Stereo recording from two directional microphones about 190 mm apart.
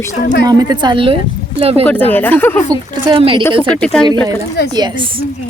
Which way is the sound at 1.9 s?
10° left (ahead or behind).